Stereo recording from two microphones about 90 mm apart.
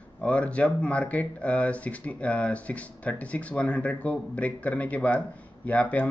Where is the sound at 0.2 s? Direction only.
15° left (ahead or behind).